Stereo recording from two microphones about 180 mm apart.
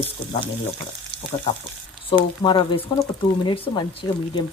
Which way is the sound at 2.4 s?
30° left (ahead or behind).